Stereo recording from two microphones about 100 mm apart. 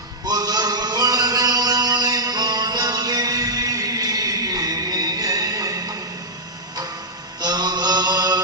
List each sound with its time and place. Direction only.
0.3 s music: 40° right (ahead or behind)
7.4 s mantra: 40° right (ahead or behind)